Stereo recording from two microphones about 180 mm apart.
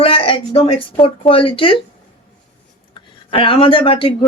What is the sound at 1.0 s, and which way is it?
Speech, 30° left (ahead or behind).